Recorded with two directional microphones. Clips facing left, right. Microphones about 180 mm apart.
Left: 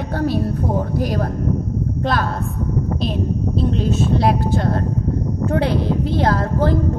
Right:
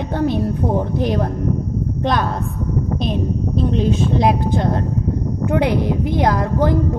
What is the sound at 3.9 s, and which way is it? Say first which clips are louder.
A woman's voice: right 1 dB; 15° right (ahead or behind).